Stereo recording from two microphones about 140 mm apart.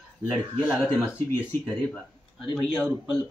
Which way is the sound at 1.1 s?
20° left (ahead or behind).